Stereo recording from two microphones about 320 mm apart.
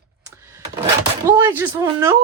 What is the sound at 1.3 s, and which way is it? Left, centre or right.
Speech, centre.